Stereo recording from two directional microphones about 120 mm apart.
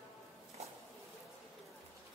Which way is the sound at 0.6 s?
65° right (ahead or behind).